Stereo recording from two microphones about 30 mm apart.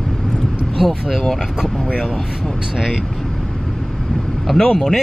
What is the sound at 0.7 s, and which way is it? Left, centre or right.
Speech, centre.